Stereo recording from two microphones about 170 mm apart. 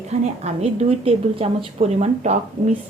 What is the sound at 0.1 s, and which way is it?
A woman's voice, 40° right (ahead or behind).